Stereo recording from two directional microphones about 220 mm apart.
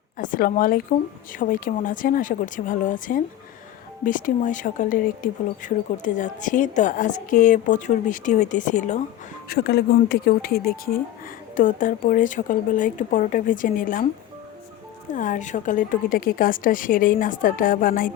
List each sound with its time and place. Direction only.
0.2 s speech: 40° left (ahead or behind)
9.5 s speech: 45° left (ahead or behind)
15.1 s speech: 35° left (ahead or behind)